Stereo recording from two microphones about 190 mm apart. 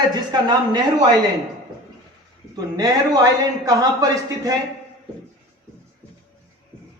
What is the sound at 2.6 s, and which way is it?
Speech, 20° right (ahead or behind).